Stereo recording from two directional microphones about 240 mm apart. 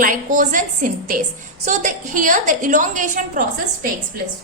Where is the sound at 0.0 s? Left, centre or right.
Right.